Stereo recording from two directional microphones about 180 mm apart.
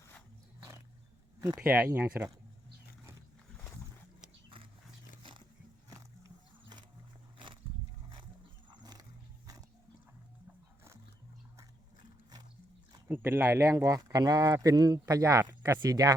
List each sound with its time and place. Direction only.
1.7 s speech: 10° right (ahead or behind)
5.9 s music: 20° right (ahead or behind)
7.3 s wild animals: 25° right (ahead or behind)
8.7 s dog: 20° right (ahead or behind)
13.1 s speech: 10° right (ahead or behind)